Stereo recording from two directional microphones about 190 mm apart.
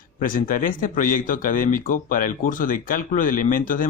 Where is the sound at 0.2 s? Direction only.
45° left (ahead or behind).